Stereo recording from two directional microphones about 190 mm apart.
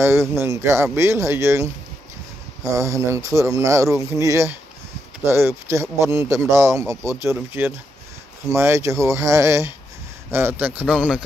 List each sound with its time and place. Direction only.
0.0 s a man's voice: 15° right (ahead or behind)